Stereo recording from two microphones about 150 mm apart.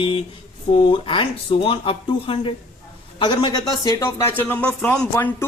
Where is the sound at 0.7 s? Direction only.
30° left (ahead or behind).